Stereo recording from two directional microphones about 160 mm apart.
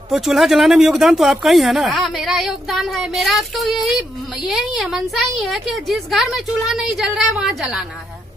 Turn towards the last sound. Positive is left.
turn(degrees=0)  # may be behind; listen again after turning